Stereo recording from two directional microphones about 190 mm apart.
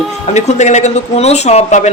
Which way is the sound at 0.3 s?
40° left (ahead or behind).